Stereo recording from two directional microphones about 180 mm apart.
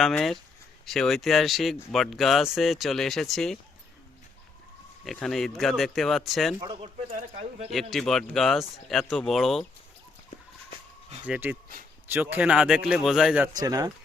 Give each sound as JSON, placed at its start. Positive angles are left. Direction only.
{"t": 0.0, "sound": "speech", "side_deg": 0}
{"t": 5.0, "sound": "speech", "side_deg": 0}
{"t": 6.6, "sound": "speech", "side_deg": -25}
{"t": 7.1, "sound": "speech", "side_deg": -50}
{"t": 7.7, "sound": "speech", "side_deg": 0}
{"t": 11.3, "sound": "speech", "side_deg": -10}
{"t": 13.6, "sound": "speech", "side_deg": -20}